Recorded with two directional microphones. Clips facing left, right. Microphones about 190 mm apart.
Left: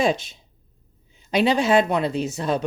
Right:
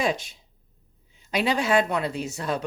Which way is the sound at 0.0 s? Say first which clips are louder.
Left 4 dB; 25° left (ahead or behind).